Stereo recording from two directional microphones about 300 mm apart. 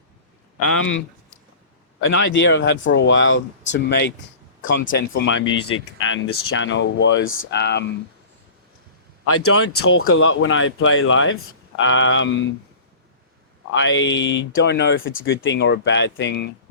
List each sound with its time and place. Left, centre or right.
0.6 s speech: left
2.0 s a man's voice: left
9.2 s speech: left
13.7 s speech: left